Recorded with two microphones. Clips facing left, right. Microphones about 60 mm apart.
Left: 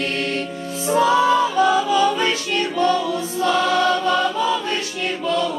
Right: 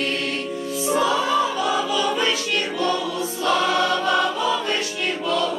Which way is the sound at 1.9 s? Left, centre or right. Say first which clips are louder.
Left 4 dB; left.